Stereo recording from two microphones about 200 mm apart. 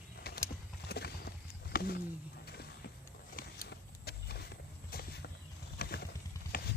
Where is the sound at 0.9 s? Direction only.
55° left (ahead or behind).